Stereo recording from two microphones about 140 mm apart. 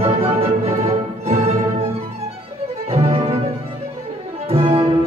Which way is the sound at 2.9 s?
45° right (ahead or behind).